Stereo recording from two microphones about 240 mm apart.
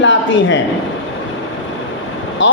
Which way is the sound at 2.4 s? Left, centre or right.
Left.